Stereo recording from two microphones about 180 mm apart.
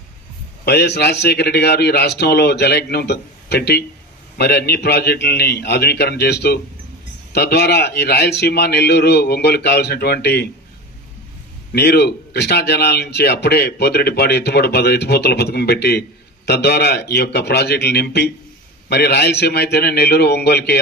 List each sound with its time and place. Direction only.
0.6 s speech: 65° left (ahead or behind)
11.7 s speech: 65° left (ahead or behind)